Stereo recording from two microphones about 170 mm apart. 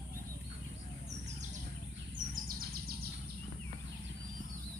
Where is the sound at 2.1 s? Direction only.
55° right (ahead or behind).